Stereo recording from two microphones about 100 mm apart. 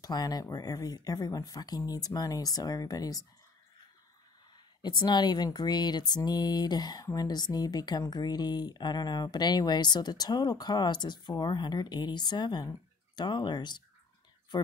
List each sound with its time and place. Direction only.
0.0 s speech: 40° left (ahead or behind)
4.8 s speech: 45° left (ahead or behind)